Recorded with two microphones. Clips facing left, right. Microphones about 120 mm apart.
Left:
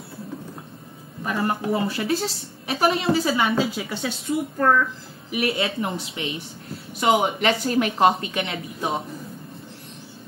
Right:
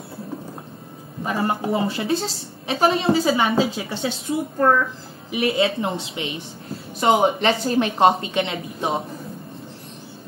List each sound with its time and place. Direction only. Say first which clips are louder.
1.2 s a woman's voice: right 1 dB; 25° right (ahead or behind)
7.2 s a woman's voice: right 3 dB; 30° right (ahead or behind)